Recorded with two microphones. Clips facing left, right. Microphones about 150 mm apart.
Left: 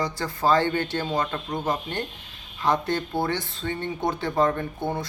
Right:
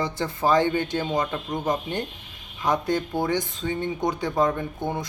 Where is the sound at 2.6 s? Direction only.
10° right (ahead or behind).